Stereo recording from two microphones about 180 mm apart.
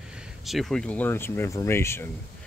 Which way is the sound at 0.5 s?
Centre (ahead or behind).